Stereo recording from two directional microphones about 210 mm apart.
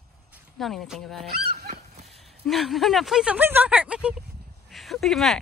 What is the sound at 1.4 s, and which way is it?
Goose, 50° right (ahead or behind).